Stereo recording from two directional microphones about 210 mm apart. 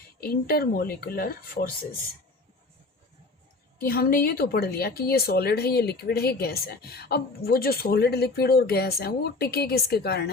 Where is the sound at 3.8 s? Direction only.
45° left (ahead or behind).